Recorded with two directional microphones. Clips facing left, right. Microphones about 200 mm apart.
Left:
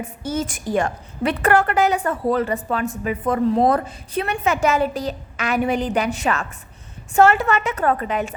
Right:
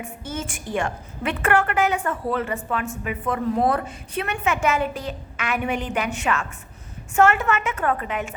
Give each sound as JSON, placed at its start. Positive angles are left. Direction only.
{"t": 0.0, "sound": "a woman's voice", "side_deg": 40}